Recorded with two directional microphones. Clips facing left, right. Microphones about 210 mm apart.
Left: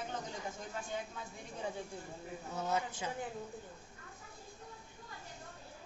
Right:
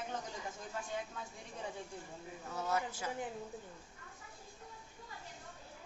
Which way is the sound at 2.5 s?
20° left (ahead or behind).